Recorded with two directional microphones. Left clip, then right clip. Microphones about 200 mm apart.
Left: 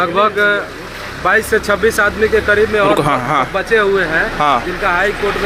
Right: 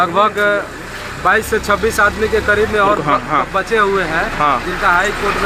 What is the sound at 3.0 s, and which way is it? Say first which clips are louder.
Speech: left 1 dB; 35° left (ahead or behind).